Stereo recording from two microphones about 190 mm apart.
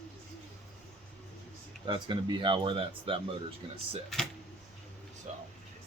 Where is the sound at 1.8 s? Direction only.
25° right (ahead or behind).